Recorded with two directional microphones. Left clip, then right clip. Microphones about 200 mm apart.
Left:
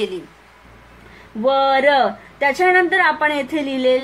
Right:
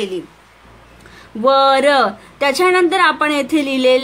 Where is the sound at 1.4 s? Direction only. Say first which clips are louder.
Right 3 dB; 55° right (ahead or behind).